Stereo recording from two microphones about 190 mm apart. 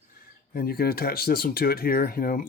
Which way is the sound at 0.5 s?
50° left (ahead or behind).